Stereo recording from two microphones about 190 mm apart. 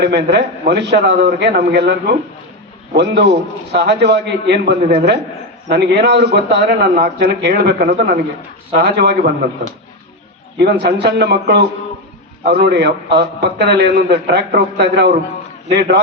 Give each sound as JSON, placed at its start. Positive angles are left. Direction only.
{"t": 0.0, "sound": "a man's voice", "side_deg": -60}
{"t": 2.9, "sound": "a man's voice", "side_deg": -65}
{"t": 10.6, "sound": "a man's voice", "side_deg": -60}